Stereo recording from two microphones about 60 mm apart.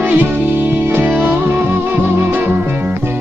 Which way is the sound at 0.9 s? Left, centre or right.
Right.